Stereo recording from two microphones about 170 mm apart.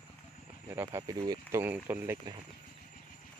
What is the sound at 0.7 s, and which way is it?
Speech, 15° right (ahead or behind).